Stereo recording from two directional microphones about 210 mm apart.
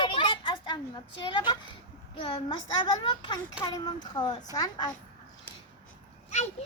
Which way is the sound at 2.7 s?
20° left (ahead or behind).